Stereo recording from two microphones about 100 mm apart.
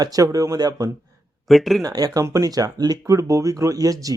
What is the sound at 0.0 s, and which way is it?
Speech, 35° right (ahead or behind).